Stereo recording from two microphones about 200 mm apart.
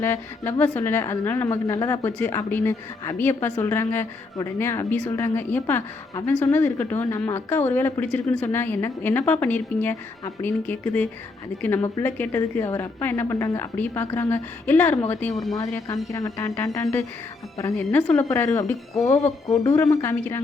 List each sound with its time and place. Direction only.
0.0 s a woman's voice: 10° left (ahead or behind)
15.5 s a woman's voice: 15° left (ahead or behind)